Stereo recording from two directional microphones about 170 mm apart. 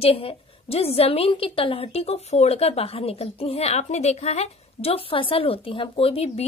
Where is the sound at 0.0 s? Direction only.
35° left (ahead or behind).